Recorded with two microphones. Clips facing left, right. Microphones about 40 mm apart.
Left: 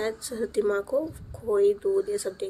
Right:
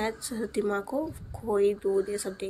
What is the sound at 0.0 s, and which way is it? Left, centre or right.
A woman's voice, centre.